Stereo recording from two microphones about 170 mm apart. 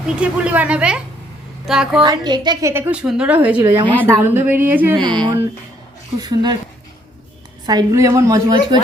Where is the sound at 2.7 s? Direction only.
15° right (ahead or behind).